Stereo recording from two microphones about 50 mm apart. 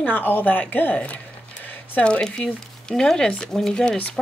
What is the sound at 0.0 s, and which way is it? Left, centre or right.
Speech, left.